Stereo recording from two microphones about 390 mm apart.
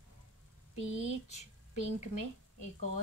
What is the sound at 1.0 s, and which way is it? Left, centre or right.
Speech, centre.